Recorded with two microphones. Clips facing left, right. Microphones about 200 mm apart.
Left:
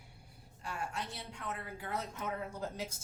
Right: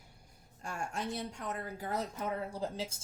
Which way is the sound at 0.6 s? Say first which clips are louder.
Right 2 dB; 45° right (ahead or behind).